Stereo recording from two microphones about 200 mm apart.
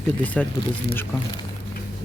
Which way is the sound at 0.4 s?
5° left (ahead or behind).